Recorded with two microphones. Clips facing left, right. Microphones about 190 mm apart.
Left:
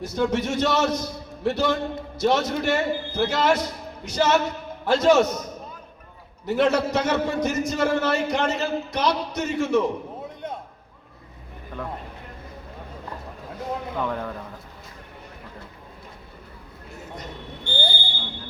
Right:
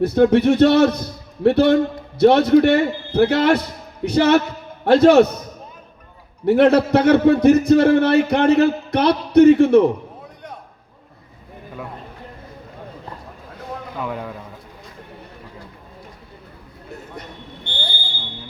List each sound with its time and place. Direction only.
0.0 s a man's voice: 60° right (ahead or behind)
6.4 s a man's voice: 60° right (ahead or behind)
14.0 s speech: 10° right (ahead or behind)